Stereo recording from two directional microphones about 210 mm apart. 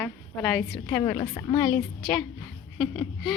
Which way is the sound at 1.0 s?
20° left (ahead or behind).